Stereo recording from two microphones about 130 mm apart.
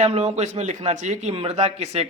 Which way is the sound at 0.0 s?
55° right (ahead or behind).